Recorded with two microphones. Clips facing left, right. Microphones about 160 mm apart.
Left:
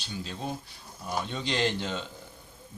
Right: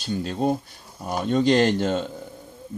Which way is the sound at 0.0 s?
50° right (ahead or behind).